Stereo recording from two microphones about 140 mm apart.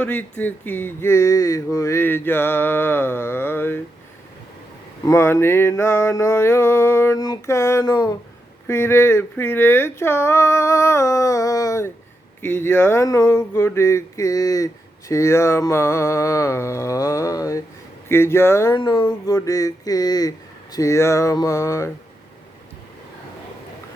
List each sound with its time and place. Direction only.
0.0 s a sound: 10° left (ahead or behind)
5.0 s speech: 20° left (ahead or behind)
8.6 s speech: 20° left (ahead or behind)
18.8 s speech: 30° left (ahead or behind)